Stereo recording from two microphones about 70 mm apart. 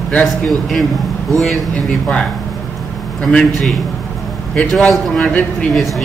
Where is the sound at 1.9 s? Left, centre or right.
Centre.